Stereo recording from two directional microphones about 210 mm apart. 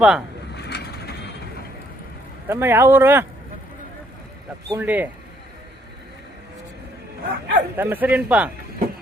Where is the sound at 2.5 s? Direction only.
10° right (ahead or behind).